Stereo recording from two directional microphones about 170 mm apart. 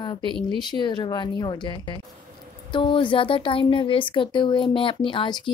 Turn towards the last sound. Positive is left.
turn(degrees=30)  # may be behind; listen again after turning